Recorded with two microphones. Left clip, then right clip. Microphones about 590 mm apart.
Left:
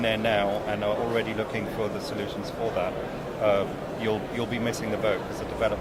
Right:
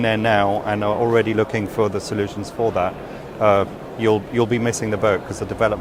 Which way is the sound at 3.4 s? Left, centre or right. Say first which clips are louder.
Right 8 dB; right.